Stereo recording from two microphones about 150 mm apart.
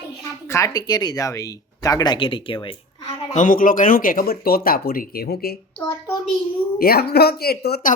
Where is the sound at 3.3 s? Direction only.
60° left (ahead or behind); by 5.6 s 90° left.